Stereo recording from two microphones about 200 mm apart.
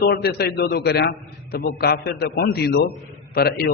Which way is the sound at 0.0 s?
50° left (ahead or behind).